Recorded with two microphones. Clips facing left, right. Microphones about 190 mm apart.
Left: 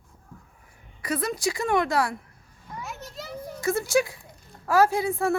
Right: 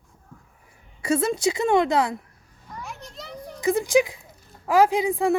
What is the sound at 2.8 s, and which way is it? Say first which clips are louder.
Children playing: left 1 dB; centre (ahead or behind).